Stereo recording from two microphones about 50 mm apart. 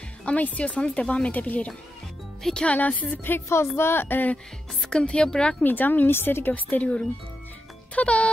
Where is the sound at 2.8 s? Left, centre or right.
Left.